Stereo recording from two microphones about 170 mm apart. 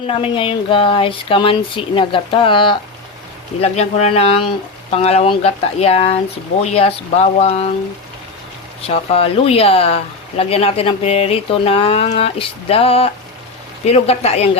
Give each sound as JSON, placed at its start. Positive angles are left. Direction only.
{"t": 0.1, "sound": "speech", "side_deg": 30}
{"t": 8.9, "sound": "speech", "side_deg": 35}